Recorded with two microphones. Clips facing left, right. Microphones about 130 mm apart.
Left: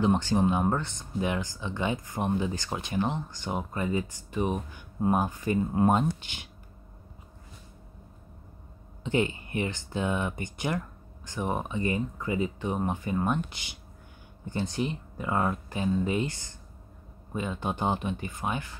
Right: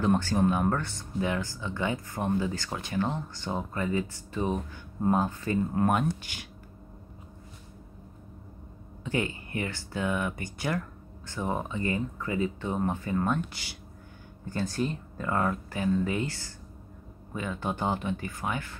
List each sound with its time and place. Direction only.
0.0 s speech: 20° left (ahead or behind)
9.0 s speech: 20° left (ahead or behind)